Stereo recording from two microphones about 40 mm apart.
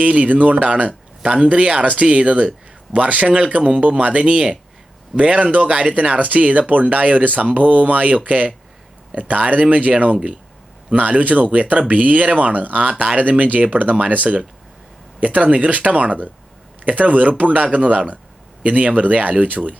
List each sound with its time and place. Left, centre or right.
0.0 s speech: right